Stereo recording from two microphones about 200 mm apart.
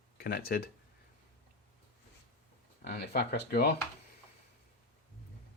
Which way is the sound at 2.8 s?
55° left (ahead or behind).